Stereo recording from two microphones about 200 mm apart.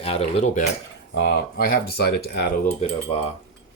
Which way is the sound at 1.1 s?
55° left (ahead or behind).